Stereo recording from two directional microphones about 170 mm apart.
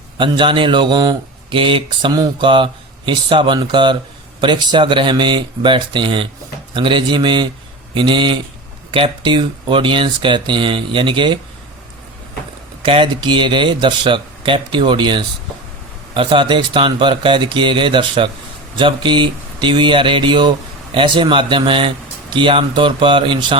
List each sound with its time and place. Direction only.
0.2 s speech: 30° right (ahead or behind)
12.8 s speech: 30° right (ahead or behind)